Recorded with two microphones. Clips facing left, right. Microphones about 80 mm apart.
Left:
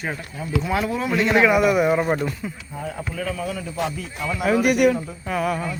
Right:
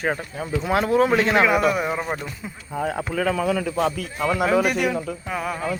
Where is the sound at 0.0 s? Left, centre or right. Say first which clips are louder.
Right 4 dB; right.